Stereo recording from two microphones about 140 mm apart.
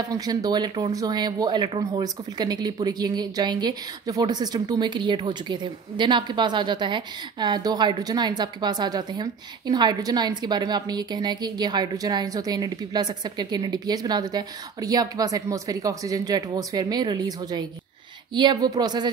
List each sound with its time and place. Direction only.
0.1 s speech: 25° right (ahead or behind)